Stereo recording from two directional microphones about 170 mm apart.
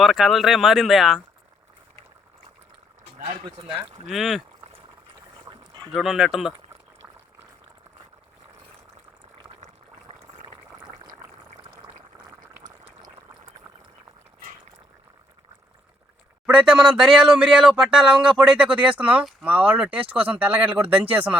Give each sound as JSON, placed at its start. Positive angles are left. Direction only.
{"t": 0.0, "sound": "speech", "side_deg": 0}
{"t": 3.7, "sound": "speech", "side_deg": -5}
{"t": 5.5, "sound": "boat", "side_deg": -25}
{"t": 5.9, "sound": "speech", "side_deg": 0}
{"t": 10.1, "sound": "boat", "side_deg": -30}
{"t": 11.0, "sound": "a sound", "side_deg": -25}
{"t": 16.5, "sound": "speech", "side_deg": -5}